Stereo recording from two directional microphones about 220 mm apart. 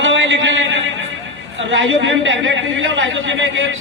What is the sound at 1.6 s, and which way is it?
A woman's voice, 60° right (ahead or behind).